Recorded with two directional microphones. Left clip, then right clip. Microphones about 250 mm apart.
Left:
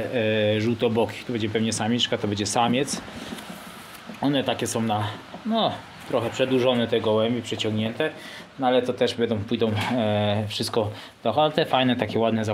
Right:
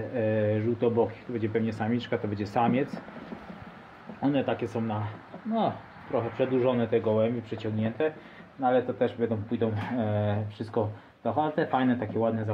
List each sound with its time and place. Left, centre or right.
0.1 s speech: left
4.2 s speech: left
6.1 s speech: left
8.5 s speech: left